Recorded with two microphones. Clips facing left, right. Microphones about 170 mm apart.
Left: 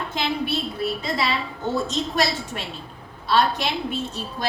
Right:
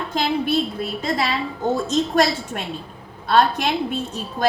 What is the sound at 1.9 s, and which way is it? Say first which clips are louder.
A woman's voice: right 5 dB; 50° right (ahead or behind).